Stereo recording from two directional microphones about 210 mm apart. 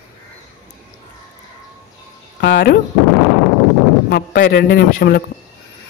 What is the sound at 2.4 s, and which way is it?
Speech, 50° left (ahead or behind).